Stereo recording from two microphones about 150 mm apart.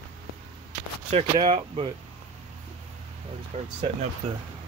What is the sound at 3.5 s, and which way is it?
Speech, 45° right (ahead or behind).